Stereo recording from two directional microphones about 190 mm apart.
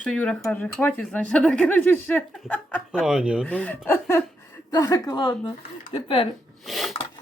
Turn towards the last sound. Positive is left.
turn(degrees=0)  # may be behind; listen again after turning